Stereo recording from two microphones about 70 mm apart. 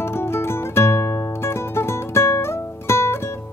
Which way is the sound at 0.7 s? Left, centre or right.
Left.